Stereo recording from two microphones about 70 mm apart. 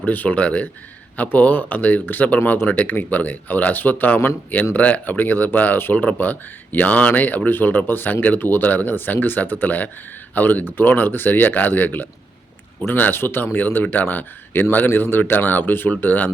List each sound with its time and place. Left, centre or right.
0.0 s speech: left